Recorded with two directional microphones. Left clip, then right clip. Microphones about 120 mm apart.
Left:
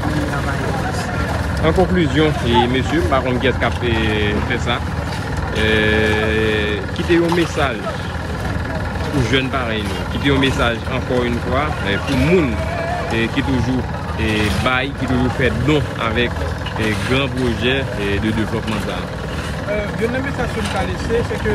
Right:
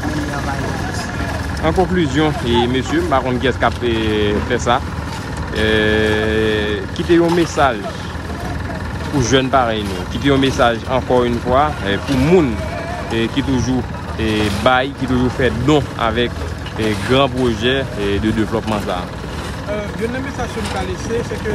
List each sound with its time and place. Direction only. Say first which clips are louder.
1.6 s speech: even; 5° right (ahead or behind)
9.2 s speech: right 6 dB; 30° right (ahead or behind)